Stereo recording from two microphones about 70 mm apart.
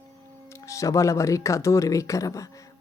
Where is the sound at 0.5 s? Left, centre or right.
Left.